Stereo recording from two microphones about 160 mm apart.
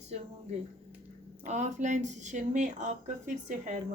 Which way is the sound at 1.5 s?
50° right (ahead or behind).